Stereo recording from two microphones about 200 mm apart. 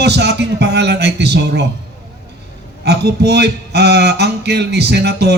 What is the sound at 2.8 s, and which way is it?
Speech, 55° right (ahead or behind).